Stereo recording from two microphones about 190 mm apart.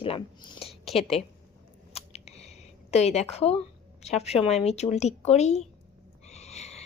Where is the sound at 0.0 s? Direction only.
25° left (ahead or behind).